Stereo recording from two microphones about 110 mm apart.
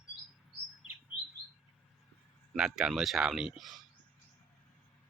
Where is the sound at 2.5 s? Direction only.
5° right (ahead or behind).